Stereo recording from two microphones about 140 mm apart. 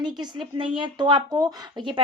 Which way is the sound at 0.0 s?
30° right (ahead or behind).